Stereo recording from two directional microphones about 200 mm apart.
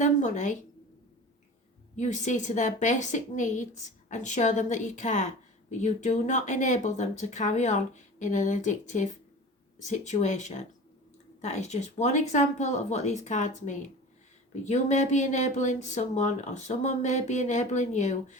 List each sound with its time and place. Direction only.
0.0 s speech: 35° left (ahead or behind)
2.0 s speech: 35° left (ahead or behind)